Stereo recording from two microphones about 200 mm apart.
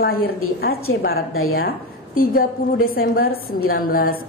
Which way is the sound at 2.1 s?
45° left (ahead or behind).